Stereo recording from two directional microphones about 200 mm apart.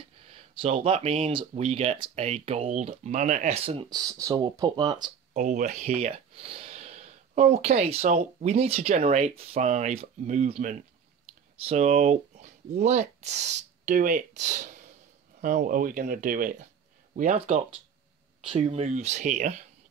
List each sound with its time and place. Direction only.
0.3 s speech: 30° right (ahead or behind)
3.9 s speech: 15° right (ahead or behind)
5.3 s speech: 40° right (ahead or behind)